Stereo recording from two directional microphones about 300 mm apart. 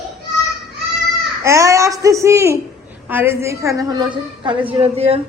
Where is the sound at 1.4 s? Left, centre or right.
Centre.